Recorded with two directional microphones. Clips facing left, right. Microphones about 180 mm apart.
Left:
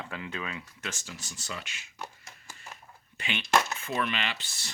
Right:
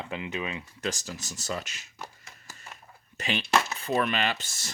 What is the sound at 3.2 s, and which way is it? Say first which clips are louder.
Speech: right 1 dB; 40° right (ahead or behind).